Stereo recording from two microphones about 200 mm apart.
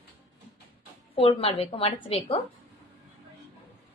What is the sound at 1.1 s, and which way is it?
A woman's voice, 30° left (ahead or behind).